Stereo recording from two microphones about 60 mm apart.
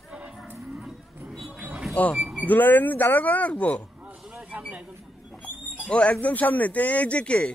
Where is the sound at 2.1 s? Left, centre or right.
Centre.